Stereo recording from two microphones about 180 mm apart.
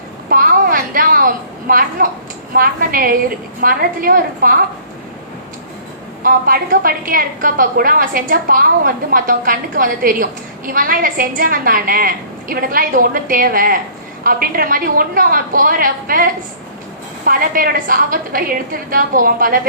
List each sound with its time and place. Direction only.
0.3 s a sound: 55° right (ahead or behind)
2.5 s a woman's voice: 55° right (ahead or behind)
6.2 s a woman's voice: 55° right (ahead or behind)